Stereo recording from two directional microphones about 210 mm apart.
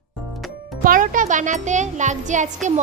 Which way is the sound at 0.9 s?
40° right (ahead or behind).